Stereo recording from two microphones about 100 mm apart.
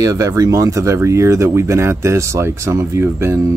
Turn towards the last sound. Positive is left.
turn(degrees=-25)  # may be behind; listen again after turning